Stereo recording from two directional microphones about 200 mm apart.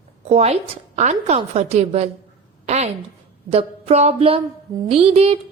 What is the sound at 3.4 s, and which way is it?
A woman's voice, 30° right (ahead or behind).